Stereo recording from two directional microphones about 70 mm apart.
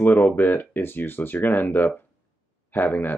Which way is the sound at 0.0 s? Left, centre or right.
Left.